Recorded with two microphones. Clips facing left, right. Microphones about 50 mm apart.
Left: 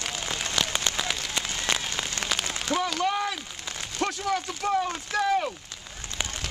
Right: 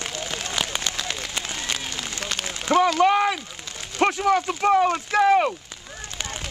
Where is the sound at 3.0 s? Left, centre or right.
Right.